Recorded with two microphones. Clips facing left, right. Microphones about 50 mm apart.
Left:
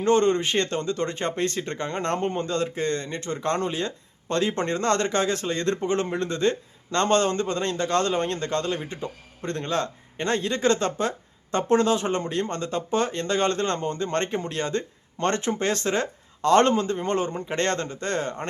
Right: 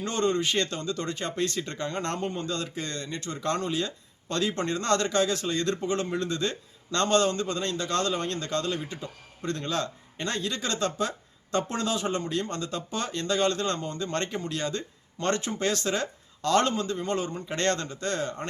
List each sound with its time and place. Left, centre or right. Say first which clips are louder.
0.0 s speech: left 6 dB; left